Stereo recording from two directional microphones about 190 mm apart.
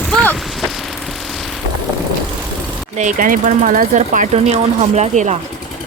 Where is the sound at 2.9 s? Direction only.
45° right (ahead or behind).